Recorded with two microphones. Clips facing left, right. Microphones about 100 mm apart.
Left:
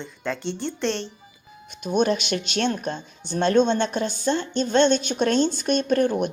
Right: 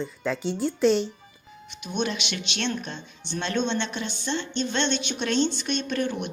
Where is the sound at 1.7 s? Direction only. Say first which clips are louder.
Left 7 dB; 45° left (ahead or behind).